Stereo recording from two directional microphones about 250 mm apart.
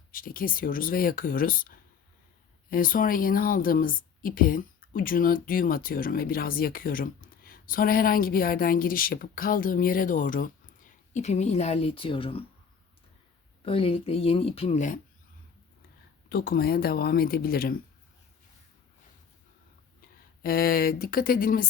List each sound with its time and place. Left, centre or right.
0.1 s a woman's voice: left
13.7 s speech: left
16.3 s a woman's voice: left
20.4 s a woman's voice: left